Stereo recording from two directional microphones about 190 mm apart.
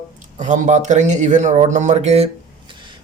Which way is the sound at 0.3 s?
40° right (ahead or behind).